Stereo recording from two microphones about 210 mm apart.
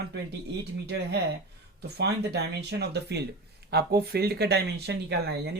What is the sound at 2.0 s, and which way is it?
Speech, 50° right (ahead or behind).